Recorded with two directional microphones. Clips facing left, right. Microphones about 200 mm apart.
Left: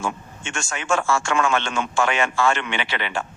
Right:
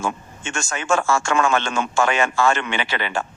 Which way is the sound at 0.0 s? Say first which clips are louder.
Right 2 dB; 40° right (ahead or behind).